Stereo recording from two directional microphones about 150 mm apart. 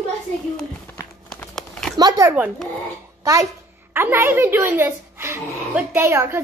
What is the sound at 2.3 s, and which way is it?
Speech, 10° right (ahead or behind).